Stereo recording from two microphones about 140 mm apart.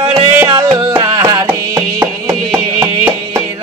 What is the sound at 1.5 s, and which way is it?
Music, 15° right (ahead or behind).